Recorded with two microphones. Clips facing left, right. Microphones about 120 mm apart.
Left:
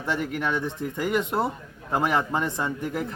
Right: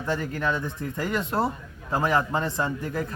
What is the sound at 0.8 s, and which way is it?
Speech, 15° left (ahead or behind).